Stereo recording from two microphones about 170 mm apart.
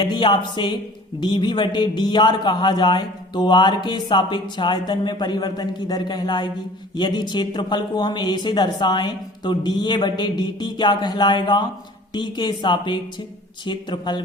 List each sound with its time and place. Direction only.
0.0 s a man's voice: 25° left (ahead or behind)